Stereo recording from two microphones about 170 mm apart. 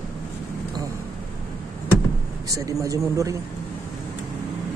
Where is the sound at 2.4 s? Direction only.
20° right (ahead or behind).